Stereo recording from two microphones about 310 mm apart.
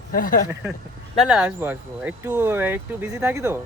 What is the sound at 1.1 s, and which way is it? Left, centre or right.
Speech, centre.